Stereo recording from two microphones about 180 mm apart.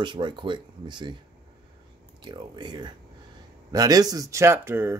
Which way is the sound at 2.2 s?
25° right (ahead or behind).